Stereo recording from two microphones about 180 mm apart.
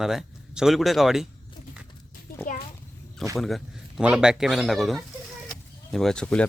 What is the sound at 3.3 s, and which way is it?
Speech, centre (ahead or behind).